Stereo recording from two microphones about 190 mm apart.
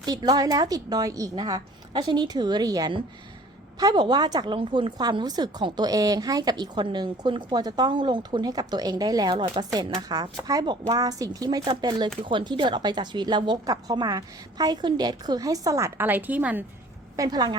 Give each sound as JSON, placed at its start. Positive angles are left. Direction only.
{"t": 0.0, "sound": "a woman's voice", "side_deg": -20}
{"t": 17.2, "sound": "a woman's voice", "side_deg": -20}